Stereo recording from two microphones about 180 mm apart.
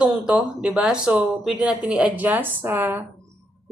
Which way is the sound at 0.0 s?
5° right (ahead or behind).